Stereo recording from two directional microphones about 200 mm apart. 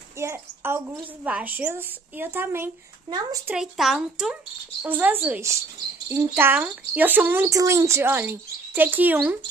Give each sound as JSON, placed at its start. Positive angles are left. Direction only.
{"t": 0.2, "sound": "speech", "side_deg": -10}
{"t": 3.5, "sound": "speech", "side_deg": 0}